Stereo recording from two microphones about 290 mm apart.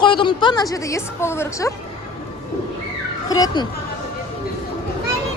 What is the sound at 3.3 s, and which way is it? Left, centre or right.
Speech, centre.